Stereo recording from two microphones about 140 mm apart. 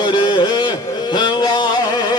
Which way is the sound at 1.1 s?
30° left (ahead or behind).